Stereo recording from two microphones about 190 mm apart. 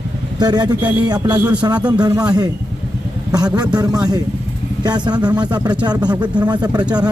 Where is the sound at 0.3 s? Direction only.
20° right (ahead or behind).